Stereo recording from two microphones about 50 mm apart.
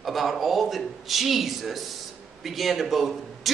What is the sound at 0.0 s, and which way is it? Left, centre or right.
Speech, centre.